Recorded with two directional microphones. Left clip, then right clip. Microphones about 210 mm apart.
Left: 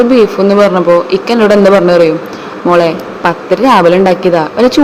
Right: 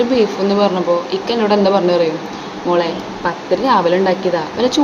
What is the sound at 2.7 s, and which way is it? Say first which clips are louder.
Speech: left 8 dB; 40° left (ahead or behind).